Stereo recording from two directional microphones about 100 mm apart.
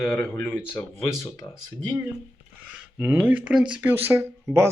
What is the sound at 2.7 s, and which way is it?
Speech, 10° right (ahead or behind).